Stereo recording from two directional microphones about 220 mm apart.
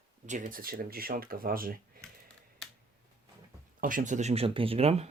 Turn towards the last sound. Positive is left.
turn(degrees=-25)  # may be behind; listen again after turning